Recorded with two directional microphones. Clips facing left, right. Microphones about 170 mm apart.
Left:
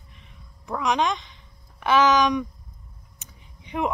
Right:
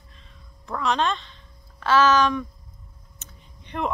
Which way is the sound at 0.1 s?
15° left (ahead or behind).